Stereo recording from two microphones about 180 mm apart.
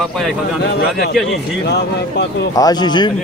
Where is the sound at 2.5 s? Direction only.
20° left (ahead or behind).